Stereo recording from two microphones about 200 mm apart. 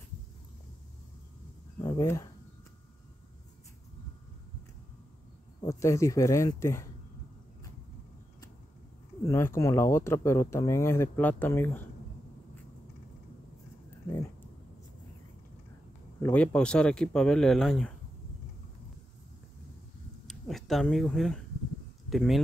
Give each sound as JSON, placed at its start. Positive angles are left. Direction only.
{"t": 1.8, "sound": "a sound", "side_deg": 20}
{"t": 5.6, "sound": "speech", "side_deg": 15}
{"t": 9.3, "sound": "speech", "side_deg": 15}
{"t": 16.2, "sound": "speech", "side_deg": 5}
{"t": 20.2, "sound": "speech", "side_deg": 0}